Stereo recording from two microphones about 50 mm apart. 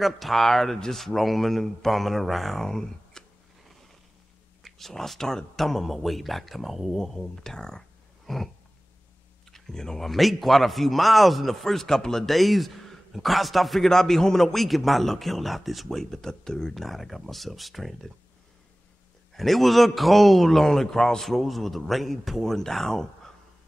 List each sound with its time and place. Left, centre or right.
0.0 s a man's voice: centre
4.6 s a man's voice: centre
9.5 s a man's voice: centre
19.3 s a man's voice: centre